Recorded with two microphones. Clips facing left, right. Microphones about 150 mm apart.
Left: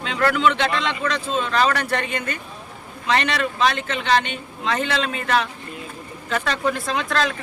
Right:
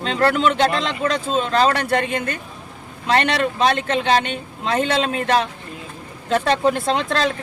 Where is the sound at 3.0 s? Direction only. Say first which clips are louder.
Right 3 dB; 40° right (ahead or behind).